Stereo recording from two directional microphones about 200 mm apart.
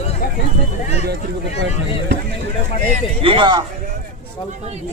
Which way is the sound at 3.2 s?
25° right (ahead or behind).